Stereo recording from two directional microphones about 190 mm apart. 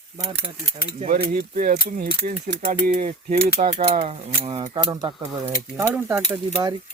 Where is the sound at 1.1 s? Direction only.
45° right (ahead or behind).